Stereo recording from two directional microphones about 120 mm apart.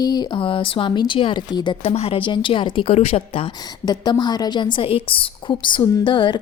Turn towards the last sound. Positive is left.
turn(degrees=40)  # may be behind; listen again after turning